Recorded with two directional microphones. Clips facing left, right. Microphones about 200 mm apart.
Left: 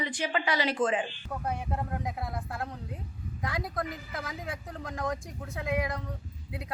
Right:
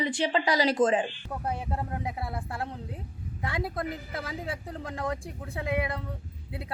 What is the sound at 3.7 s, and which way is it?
A woman's voice, 30° right (ahead or behind).